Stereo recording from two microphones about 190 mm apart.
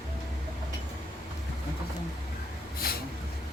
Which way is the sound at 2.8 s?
55° left (ahead or behind).